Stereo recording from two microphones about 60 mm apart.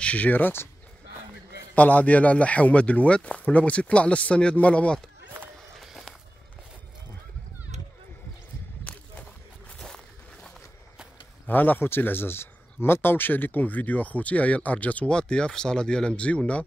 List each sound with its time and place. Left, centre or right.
0.0 s speech: left
1.8 s speech: left
5.8 s walk: centre
9.8 s a sound: centre
11.4 s speech: left